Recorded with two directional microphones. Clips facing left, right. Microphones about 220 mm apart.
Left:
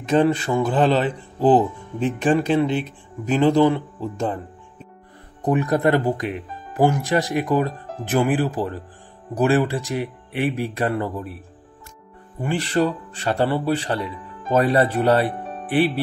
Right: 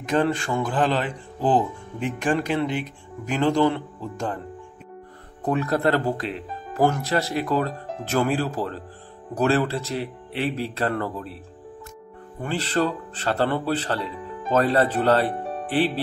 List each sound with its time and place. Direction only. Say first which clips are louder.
0.1 s speech: left 4 dB; 20° left (ahead or behind)
5.4 s speech: left 3 dB; 15° left (ahead or behind)
12.4 s speech: left 3 dB; 15° left (ahead or behind)